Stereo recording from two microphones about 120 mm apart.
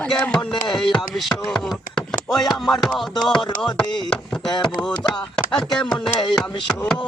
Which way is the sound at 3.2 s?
40° left (ahead or behind).